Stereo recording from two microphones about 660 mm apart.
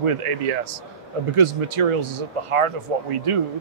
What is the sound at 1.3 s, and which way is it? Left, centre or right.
Speech, right.